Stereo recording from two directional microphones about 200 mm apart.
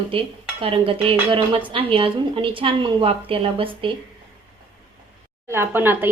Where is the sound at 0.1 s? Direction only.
30° right (ahead or behind).